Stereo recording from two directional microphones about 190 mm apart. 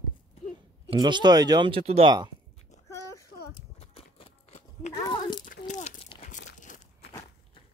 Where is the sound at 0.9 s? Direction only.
25° right (ahead or behind).